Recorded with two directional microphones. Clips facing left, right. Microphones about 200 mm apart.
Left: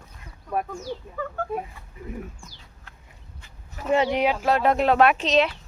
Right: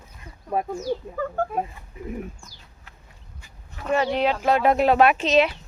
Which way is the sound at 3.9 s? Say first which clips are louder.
Left 1 dB; 20° left (ahead or behind).